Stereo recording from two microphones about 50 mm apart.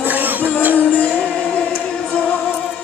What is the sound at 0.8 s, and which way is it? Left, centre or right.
Music, left.